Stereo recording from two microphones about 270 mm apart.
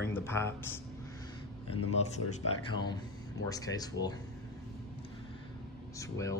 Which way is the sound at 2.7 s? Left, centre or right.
Centre.